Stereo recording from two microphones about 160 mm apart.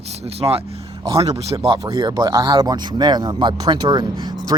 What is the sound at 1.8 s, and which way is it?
Speech, 25° right (ahead or behind).